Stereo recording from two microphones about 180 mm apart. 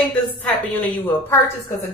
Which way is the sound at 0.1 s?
10° left (ahead or behind).